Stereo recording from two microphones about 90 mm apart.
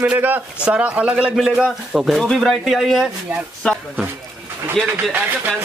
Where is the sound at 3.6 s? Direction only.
10° left (ahead or behind).